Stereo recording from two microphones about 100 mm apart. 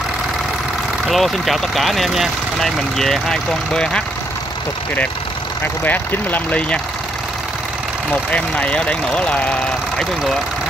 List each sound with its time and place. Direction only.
1.0 s speech: centre (ahead or behind)
5.9 s speech: 15° left (ahead or behind)
8.1 s speech: 15° left (ahead or behind)